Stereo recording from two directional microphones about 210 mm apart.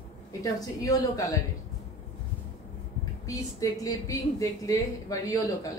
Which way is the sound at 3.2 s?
15° left (ahead or behind).